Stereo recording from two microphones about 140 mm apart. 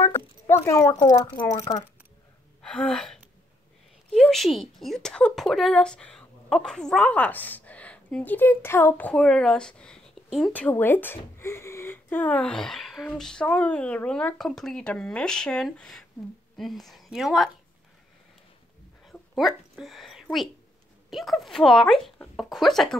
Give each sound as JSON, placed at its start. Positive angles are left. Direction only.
{"t": 0.5, "sound": "speech", "side_deg": 20}
{"t": 1.0, "sound": "speech", "side_deg": 35}
{"t": 2.6, "sound": "a woman's voice", "side_deg": 5}
{"t": 10.5, "sound": "a woman's voice", "side_deg": 15}
{"t": 19.0, "sound": "a sound", "side_deg": 0}
{"t": 21.1, "sound": "a woman's voice", "side_deg": 0}